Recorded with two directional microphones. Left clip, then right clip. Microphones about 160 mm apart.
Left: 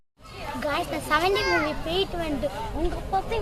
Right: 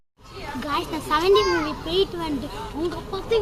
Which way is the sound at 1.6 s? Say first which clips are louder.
Right 3 dB; 15° left (ahead or behind).